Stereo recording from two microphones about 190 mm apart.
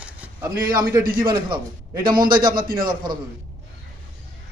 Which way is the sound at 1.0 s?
50° right (ahead or behind).